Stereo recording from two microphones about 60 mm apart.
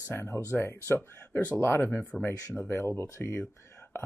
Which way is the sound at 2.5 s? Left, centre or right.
Left.